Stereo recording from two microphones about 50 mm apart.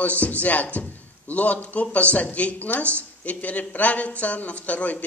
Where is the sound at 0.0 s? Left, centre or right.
Left.